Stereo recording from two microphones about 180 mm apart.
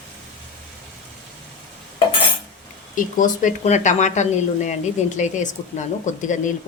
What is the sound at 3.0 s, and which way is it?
Speech, 45° left (ahead or behind).